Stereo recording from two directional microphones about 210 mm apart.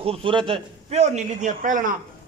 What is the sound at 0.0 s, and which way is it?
A man's voice, 25° right (ahead or behind).